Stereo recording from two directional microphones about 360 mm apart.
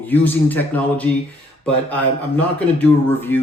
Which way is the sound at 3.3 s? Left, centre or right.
Centre.